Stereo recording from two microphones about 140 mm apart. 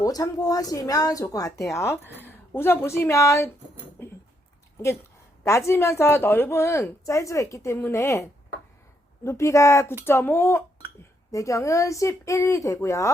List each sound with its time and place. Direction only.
0.0 s a woman's voice: 25° left (ahead or behind)
4.0 s a sound: 15° left (ahead or behind)
5.5 s a woman's voice: 20° left (ahead or behind)